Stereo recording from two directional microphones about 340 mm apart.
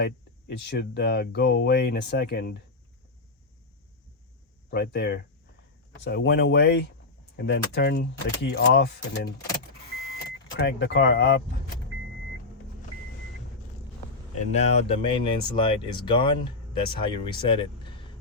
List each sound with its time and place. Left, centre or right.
0.0 s speech: left
4.7 s speech: left
14.5 s speech: centre